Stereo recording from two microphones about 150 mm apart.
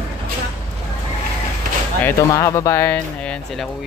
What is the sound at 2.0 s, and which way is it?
Speech, 15° left (ahead or behind).